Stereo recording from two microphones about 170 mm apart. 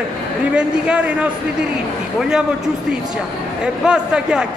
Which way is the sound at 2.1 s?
5° right (ahead or behind).